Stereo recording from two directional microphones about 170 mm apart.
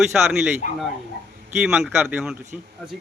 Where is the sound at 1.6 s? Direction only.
5° right (ahead or behind).